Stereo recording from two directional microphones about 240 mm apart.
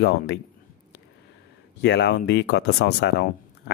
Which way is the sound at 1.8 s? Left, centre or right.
Left.